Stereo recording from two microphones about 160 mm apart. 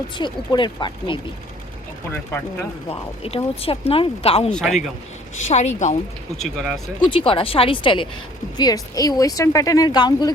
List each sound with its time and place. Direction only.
0.2 s speech: 30° left (ahead or behind)
2.9 s speech: 40° left (ahead or behind)
4.5 s speech: centre (ahead or behind)
5.5 s speech: 45° left (ahead or behind)
6.4 s speech: centre (ahead or behind)
7.0 s speech: 35° left (ahead or behind)